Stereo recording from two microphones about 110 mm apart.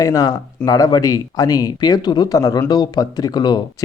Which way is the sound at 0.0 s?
30° left (ahead or behind).